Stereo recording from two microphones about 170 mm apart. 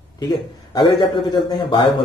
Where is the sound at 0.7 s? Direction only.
25° left (ahead or behind).